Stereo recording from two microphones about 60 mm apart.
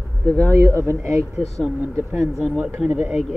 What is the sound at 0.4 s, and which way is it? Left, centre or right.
Speech, right.